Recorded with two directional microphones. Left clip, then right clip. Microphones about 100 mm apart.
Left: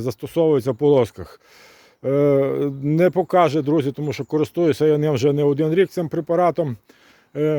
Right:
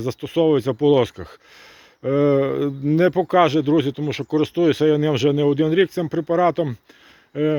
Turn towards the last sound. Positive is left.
turn(degrees=45)  # may be behind; listen again after turning